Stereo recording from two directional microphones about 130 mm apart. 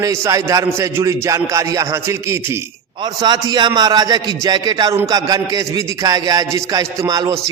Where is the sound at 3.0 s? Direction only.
30° right (ahead or behind).